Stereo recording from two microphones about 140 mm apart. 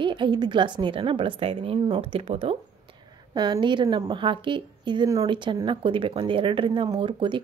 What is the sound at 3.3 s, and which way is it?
Speech, 30° right (ahead or behind).